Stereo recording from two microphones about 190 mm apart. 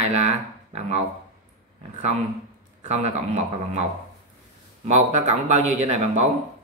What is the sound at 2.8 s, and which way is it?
Speech, 35° right (ahead or behind).